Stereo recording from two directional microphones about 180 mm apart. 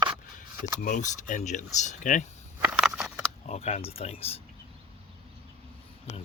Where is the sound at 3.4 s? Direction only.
35° left (ahead or behind).